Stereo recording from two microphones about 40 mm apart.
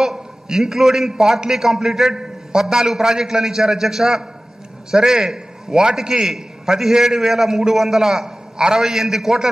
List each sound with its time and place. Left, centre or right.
0.0 s a man's voice: centre